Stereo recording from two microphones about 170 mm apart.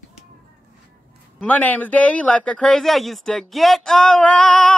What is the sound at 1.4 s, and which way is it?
Speech, 10° left (ahead or behind).